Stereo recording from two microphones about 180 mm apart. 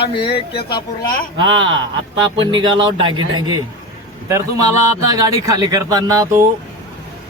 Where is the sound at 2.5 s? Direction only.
25° right (ahead or behind).